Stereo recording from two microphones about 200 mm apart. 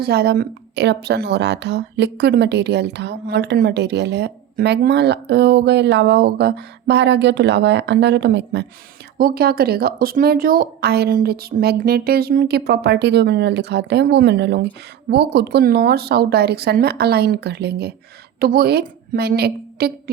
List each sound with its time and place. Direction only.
0.0 s a woman's voice: 55° right (ahead or behind)
9.1 s a woman's voice: 50° right (ahead or behind)